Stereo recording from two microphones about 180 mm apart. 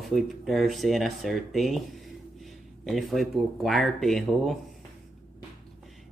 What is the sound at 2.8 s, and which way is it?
Speech, centre (ahead or behind).